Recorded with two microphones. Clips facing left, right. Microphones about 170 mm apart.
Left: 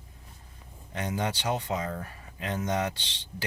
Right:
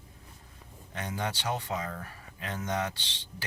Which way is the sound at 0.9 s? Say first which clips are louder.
Left 4 dB; 20° left (ahead or behind).